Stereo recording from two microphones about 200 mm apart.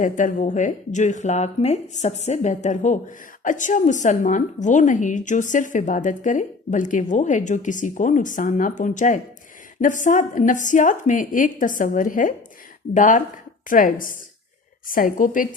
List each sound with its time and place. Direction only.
0.0 s a woman's voice: 40° left (ahead or behind)